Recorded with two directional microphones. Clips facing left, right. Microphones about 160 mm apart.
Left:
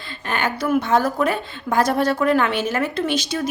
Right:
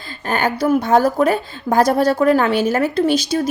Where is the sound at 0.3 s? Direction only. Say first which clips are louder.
Right 5 dB; 40° right (ahead or behind).